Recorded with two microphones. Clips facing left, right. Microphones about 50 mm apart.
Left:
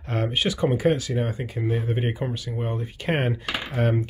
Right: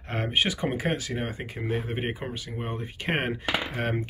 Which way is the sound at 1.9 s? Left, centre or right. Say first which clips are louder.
Left 4 dB; right.